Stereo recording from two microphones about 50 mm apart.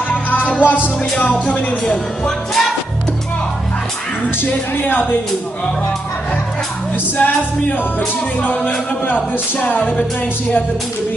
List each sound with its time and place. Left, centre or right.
0.1 s music: left
2.2 s music: centre
4.7 s music: left
7.2 s music: left